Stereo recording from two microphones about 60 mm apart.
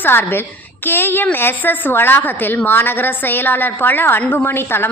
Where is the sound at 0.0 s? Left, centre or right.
Left.